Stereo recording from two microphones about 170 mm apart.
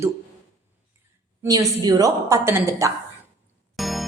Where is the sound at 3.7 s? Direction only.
Centre (ahead or behind).